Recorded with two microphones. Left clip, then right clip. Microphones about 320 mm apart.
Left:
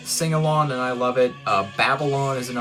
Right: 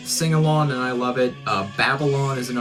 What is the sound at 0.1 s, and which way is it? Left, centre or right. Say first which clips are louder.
Speech: even; centre.